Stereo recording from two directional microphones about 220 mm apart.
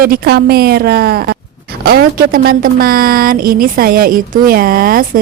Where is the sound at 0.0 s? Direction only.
45° right (ahead or behind).